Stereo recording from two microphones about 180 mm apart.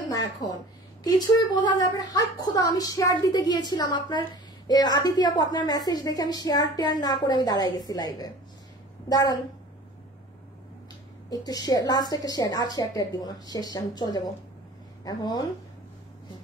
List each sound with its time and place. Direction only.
0.1 s a woman's voice: 20° left (ahead or behind)
11.2 s a woman's voice: 20° left (ahead or behind)